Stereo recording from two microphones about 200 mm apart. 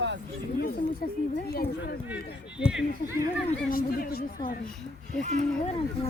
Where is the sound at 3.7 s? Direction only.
45° left (ahead or behind).